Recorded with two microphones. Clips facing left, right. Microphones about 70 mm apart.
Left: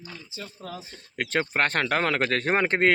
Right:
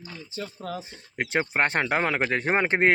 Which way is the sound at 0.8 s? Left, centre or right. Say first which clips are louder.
Right 1 dB; right.